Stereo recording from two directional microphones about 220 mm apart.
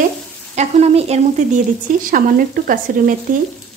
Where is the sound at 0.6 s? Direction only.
30° right (ahead or behind).